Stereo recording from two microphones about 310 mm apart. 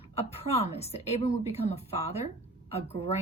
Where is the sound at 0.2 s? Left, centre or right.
Centre.